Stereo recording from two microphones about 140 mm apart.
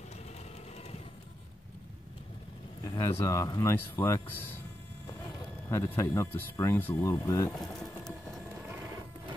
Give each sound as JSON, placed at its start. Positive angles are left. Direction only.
{"t": 2.8, "sound": "speech", "side_deg": 20}
{"t": 5.7, "sound": "speech", "side_deg": 20}